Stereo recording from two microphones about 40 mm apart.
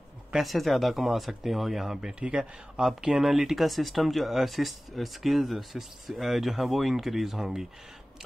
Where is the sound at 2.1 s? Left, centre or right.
Right.